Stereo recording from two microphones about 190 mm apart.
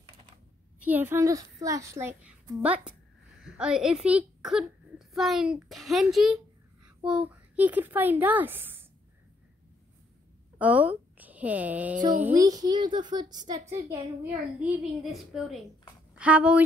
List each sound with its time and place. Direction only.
0.7 s a woman's voice: 10° right (ahead or behind)
10.6 s a woman's voice: 5° right (ahead or behind)
12.4 s a woman's voice: 20° right (ahead or behind)
15.0 s a woman's voice: centre (ahead or behind)